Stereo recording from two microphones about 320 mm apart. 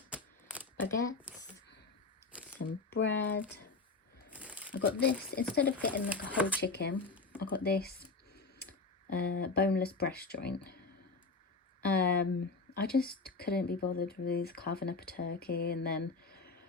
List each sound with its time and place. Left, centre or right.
0.1 s shuffling cards: centre
2.9 s speech: left
4.3 s crumpling: centre
4.7 s speech: left
5.9 s speech: centre
6.6 s speech: left
6.9 s a sound: centre
7.6 s computer keyboard: left
9.1 s speech: left
11.8 s speech: left